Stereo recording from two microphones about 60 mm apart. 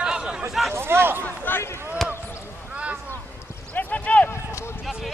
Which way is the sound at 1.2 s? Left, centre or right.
Left.